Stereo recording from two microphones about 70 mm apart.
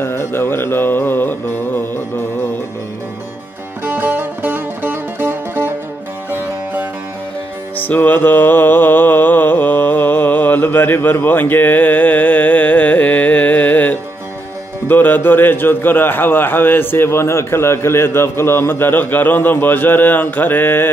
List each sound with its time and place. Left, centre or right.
0.0 s music: left
3.8 s music: right
7.7 s music: left
14.9 s a man's voice: left